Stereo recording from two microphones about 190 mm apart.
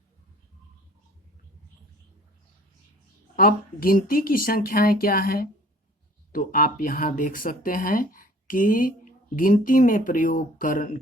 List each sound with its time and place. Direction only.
3.3 s speech: 50° left (ahead or behind)